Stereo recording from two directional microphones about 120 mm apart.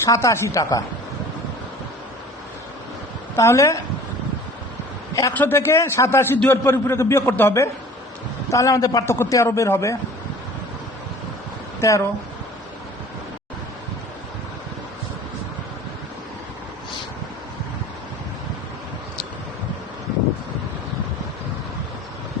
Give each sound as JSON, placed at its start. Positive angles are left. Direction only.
{"t": 0.0, "sound": "a man's voice", "side_deg": 25}
{"t": 3.3, "sound": "a man's voice", "side_deg": 25}
{"t": 5.3, "sound": "a man's voice", "side_deg": 15}
{"t": 11.8, "sound": "a man's voice", "side_deg": 25}